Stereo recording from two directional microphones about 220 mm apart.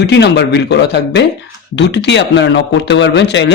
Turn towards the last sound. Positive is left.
turn(degrees=55)  # may be behind; listen again after turning